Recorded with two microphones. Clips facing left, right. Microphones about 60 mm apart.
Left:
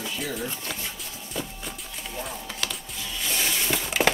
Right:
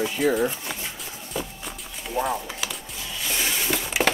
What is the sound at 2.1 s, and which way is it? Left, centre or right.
Chopping, right.